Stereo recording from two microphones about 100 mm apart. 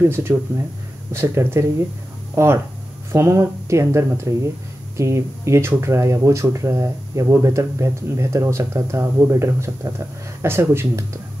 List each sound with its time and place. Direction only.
0.0 s speech: 25° right (ahead or behind)